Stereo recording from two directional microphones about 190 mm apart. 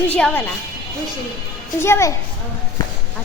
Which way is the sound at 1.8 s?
15° left (ahead or behind).